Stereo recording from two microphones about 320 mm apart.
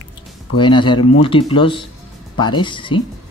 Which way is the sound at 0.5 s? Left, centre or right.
Centre.